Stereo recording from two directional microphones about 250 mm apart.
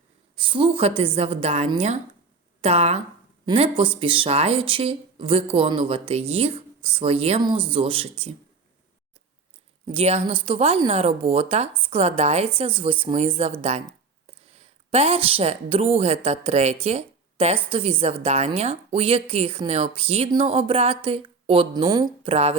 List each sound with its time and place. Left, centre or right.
0.3 s a woman's voice: centre
9.8 s a woman's voice: right
16.8 s a sound: right
17.7 s a woman's voice: right